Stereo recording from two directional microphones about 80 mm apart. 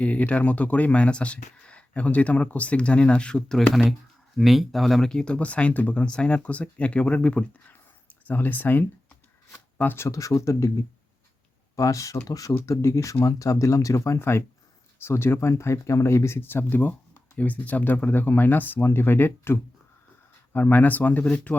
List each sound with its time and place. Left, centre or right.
0.0 s speech: centre
10.1 s speech: left
11.8 s speech: left